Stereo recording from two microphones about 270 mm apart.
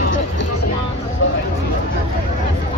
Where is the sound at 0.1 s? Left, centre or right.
Left.